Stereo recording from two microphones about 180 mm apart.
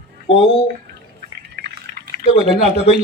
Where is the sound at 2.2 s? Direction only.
35° left (ahead or behind).